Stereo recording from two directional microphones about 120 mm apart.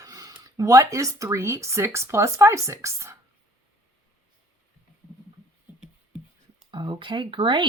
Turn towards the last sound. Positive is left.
turn(degrees=-40)  # may be behind; listen again after turning